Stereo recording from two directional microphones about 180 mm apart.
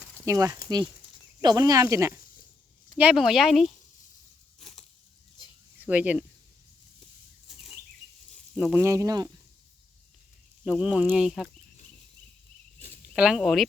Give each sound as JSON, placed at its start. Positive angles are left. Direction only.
{"t": 0.3, "sound": "speech", "side_deg": -15}
{"t": 3.0, "sound": "speech", "side_deg": -5}
{"t": 4.6, "sound": "a sound", "side_deg": 40}
{"t": 5.8, "sound": "speech", "side_deg": -10}
{"t": 8.5, "sound": "speech", "side_deg": -10}
{"t": 10.7, "sound": "speech", "side_deg": -5}
{"t": 13.1, "sound": "speech", "side_deg": -5}